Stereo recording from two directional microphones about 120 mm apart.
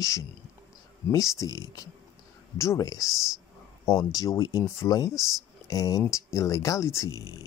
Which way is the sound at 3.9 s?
25° left (ahead or behind).